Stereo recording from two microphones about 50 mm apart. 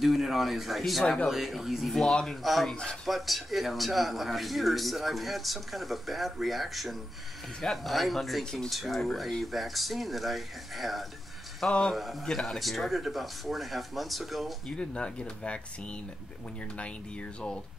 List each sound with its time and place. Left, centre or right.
0.0 s a man's voice: centre
1.0 s speech: centre
1.3 s a man's voice: centre
2.0 s speech: centre
2.7 s speech: centre
3.1 s a man's voice: centre
14.7 s speech: centre